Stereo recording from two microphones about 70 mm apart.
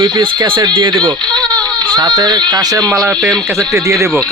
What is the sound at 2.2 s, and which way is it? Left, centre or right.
Speech, right.